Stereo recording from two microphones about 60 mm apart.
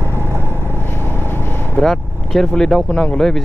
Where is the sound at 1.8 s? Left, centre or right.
Centre.